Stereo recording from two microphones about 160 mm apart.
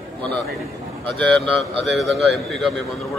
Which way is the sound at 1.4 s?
35° right (ahead or behind).